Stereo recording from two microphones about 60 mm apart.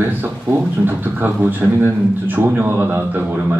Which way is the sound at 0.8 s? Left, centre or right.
Right.